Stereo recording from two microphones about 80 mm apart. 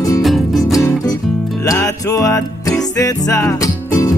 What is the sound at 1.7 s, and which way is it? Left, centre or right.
Music, left.